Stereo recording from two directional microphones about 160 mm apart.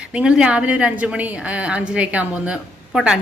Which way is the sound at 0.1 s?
5° right (ahead or behind).